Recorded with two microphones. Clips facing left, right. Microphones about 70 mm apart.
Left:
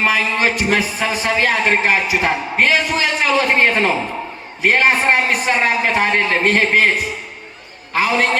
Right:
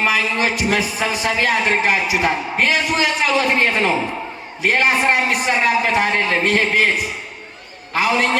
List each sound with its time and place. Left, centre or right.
0.0 s a man's voice: left